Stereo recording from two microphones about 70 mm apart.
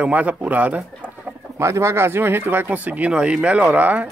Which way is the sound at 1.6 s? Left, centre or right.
Right.